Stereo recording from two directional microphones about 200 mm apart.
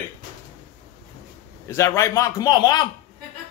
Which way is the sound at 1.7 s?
15° left (ahead or behind).